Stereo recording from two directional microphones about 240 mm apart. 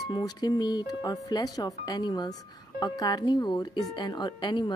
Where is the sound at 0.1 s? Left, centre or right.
Centre.